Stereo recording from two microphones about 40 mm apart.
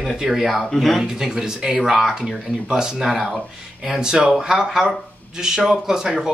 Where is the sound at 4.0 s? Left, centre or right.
Centre.